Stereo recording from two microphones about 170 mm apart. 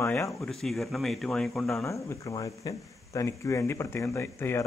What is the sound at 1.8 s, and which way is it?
Speech, 15° left (ahead or behind).